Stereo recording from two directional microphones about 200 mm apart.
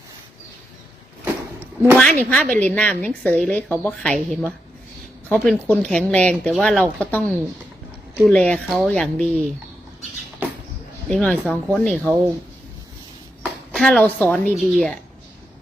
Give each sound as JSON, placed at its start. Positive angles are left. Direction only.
{"t": 2.0, "sound": "a woman's voice", "side_deg": 5}
{"t": 10.4, "sound": "a sound", "side_deg": -10}
{"t": 11.1, "sound": "speech", "side_deg": 5}
{"t": 13.7, "sound": "speech", "side_deg": 5}